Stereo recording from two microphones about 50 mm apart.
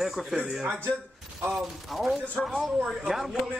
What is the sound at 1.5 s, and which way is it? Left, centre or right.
Speech, centre.